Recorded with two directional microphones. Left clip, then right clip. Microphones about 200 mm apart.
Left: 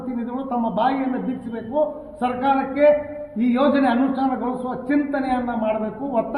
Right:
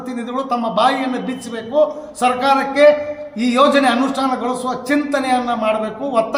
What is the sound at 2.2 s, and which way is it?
A man's voice, 35° right (ahead or behind).